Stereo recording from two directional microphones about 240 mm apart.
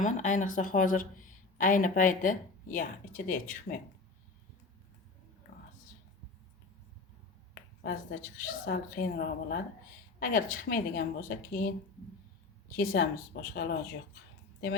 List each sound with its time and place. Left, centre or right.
0.0 s speech: left
7.9 s speech: left
12.7 s speech: left